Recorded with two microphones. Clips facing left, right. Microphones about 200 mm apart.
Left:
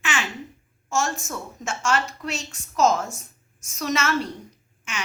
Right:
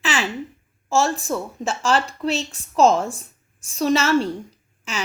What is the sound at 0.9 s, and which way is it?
A woman's voice, 35° right (ahead or behind).